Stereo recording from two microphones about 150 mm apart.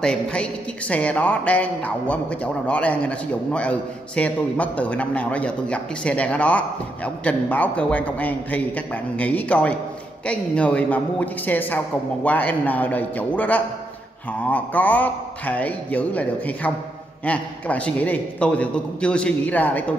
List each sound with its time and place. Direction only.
0.0 s a man's voice: 5° left (ahead or behind)